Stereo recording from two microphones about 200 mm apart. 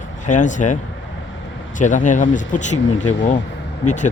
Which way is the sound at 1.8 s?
40° left (ahead or behind).